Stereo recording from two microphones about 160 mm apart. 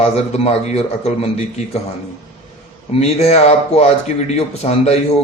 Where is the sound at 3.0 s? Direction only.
40° left (ahead or behind).